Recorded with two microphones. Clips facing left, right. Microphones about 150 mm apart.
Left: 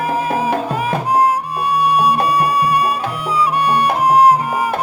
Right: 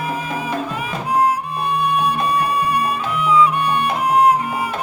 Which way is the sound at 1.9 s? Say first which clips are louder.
Left 4 dB; 40° left (ahead or behind).